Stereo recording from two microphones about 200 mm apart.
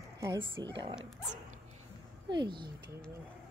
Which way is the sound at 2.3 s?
20° right (ahead or behind).